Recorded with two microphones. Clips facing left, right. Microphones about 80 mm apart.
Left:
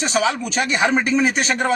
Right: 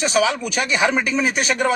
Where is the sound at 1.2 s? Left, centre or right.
Left.